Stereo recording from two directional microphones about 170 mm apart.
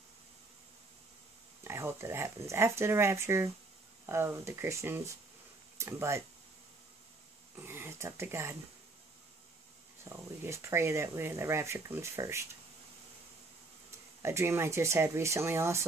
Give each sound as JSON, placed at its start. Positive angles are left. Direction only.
{"t": 1.6, "sound": "speech", "side_deg": -15}
{"t": 7.5, "sound": "speech", "side_deg": -15}
{"t": 10.0, "sound": "speech", "side_deg": -15}
{"t": 13.8, "sound": "speech", "side_deg": -15}